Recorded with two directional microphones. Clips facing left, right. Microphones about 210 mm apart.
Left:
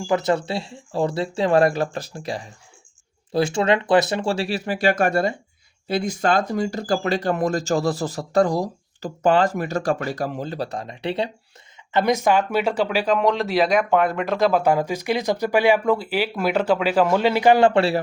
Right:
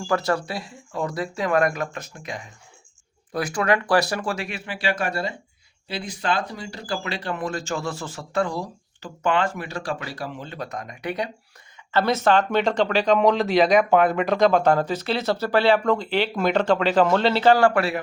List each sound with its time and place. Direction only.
0.1 s speech: 20° left (ahead or behind)
11.9 s speech: 15° left (ahead or behind)